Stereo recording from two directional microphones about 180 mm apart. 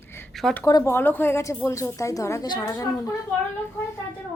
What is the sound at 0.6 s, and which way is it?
Speech, 20° left (ahead or behind).